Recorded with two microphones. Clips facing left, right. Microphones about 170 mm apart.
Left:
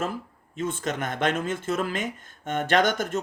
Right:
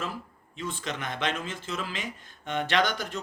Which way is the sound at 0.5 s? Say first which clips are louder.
Left 6 dB; 50° left (ahead or behind).